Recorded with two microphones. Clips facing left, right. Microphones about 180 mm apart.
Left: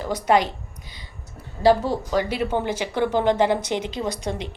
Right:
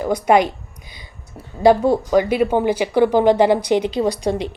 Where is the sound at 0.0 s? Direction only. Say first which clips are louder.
Right 5 dB; 10° right (ahead or behind).